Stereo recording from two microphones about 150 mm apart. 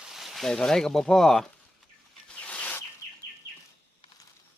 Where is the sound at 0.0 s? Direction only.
Centre (ahead or behind).